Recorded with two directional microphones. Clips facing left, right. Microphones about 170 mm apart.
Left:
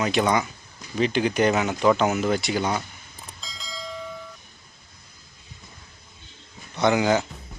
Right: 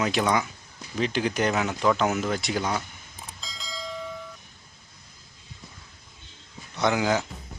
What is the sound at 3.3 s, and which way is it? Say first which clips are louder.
Bell: even; centre (ahead or behind).